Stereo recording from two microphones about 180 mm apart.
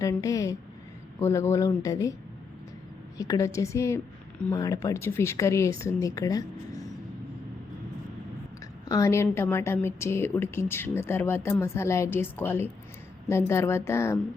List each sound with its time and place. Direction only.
0.0 s a woman's voice: 20° left (ahead or behind)
3.2 s a woman's voice: 20° left (ahead or behind)
8.9 s a woman's voice: 15° left (ahead or behind)